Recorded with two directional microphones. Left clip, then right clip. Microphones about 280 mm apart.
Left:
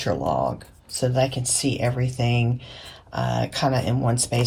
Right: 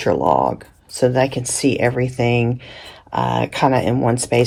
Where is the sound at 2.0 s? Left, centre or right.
Right.